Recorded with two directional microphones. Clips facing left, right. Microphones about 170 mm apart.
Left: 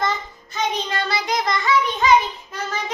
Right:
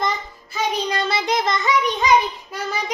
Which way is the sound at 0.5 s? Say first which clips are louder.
Right 1 dB; 15° right (ahead or behind).